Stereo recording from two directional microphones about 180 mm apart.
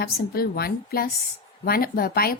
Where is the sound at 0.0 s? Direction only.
60° left (ahead or behind).